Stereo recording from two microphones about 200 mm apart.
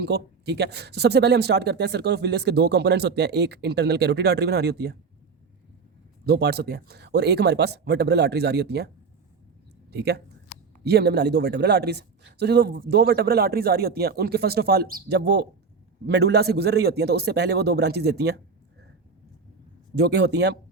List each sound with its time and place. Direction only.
0.0 s speech: 55° right (ahead or behind)
6.2 s speech: 50° right (ahead or behind)
9.9 s a man's voice: 55° right (ahead or behind)
20.0 s speech: 55° right (ahead or behind)